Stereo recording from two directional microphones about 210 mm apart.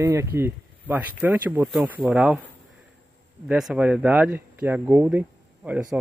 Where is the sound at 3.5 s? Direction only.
5° right (ahead or behind).